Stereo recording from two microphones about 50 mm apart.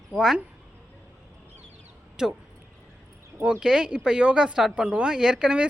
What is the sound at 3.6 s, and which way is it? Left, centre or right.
Speech, centre.